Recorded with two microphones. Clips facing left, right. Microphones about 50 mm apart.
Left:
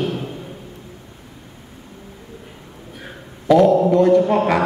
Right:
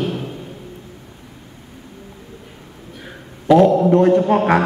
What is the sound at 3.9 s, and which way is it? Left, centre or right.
Speech, right.